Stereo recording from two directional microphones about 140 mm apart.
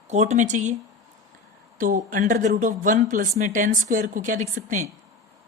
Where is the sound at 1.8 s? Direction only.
70° right (ahead or behind).